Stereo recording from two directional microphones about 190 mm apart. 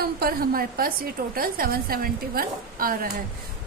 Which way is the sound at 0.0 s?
50° right (ahead or behind).